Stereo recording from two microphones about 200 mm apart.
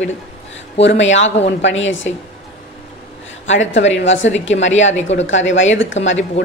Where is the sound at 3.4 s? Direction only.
70° left (ahead or behind).